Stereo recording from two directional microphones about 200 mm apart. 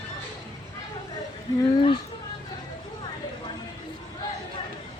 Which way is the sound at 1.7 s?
25° left (ahead or behind).